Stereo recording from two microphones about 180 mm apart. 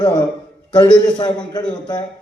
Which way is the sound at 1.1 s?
25° left (ahead or behind).